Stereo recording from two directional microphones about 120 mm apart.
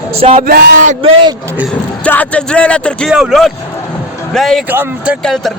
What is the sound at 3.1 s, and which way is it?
Speech, 5° right (ahead or behind).